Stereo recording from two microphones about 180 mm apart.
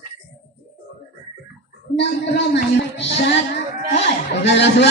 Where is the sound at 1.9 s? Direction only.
75° left (ahead or behind).